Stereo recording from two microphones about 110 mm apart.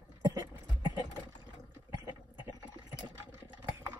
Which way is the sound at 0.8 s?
45° left (ahead or behind).